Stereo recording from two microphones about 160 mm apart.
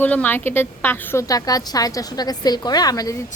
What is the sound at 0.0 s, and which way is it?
A woman's voice, 10° left (ahead or behind).